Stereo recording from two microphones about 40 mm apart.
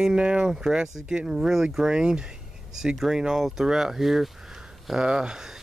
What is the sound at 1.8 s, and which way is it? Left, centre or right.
Speech, right.